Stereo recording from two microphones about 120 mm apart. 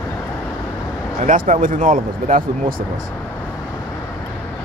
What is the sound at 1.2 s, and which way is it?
Speech, 90° right.